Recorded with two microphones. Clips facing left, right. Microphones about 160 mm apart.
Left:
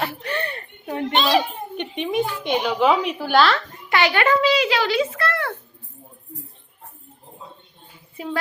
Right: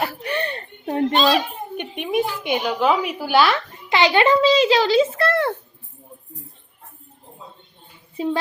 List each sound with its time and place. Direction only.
0.2 s chuckle: 20° right (ahead or behind)
0.9 s a child's voice: 40° right (ahead or behind)
1.7 s a woman's voice: 5° right (ahead or behind); by 5.5 s 30° right (ahead or behind)
8.1 s a woman's voice: 25° right (ahead or behind)